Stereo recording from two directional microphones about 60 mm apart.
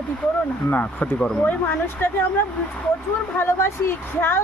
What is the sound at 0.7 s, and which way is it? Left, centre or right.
Speech, left.